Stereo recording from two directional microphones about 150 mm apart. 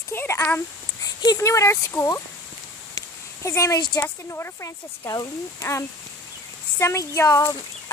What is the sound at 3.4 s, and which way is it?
Speech, 20° left (ahead or behind).